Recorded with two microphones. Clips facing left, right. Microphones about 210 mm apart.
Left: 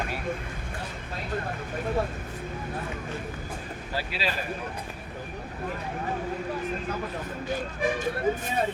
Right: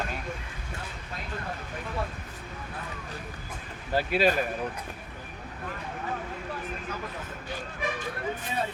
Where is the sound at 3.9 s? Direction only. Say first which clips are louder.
Right 8 dB; 50° right (ahead or behind).